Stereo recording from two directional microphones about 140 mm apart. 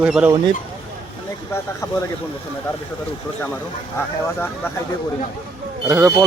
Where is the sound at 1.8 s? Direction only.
25° left (ahead or behind).